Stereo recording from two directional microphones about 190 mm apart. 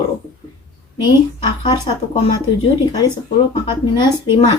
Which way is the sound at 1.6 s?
25° left (ahead or behind).